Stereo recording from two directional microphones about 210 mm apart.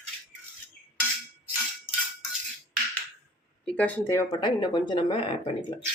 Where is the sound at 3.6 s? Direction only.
5° left (ahead or behind); by 5.8 s 25° left (ahead or behind).